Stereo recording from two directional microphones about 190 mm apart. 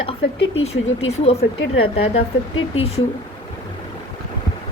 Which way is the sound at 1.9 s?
30° left (ahead or behind).